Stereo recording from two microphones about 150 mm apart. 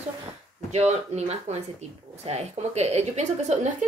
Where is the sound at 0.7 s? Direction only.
50° right (ahead or behind).